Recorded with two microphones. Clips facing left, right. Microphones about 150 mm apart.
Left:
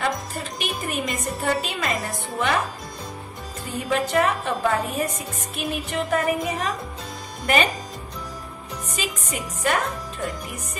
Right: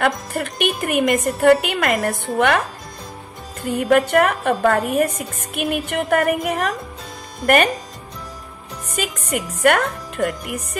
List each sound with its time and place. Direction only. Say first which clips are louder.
0.0 s a woman's voice: right 6 dB; 65° right (ahead or behind)
3.7 s a woman's voice: right 7 dB; 60° right (ahead or behind)
8.9 s a woman's voice: right 7 dB; 60° right (ahead or behind)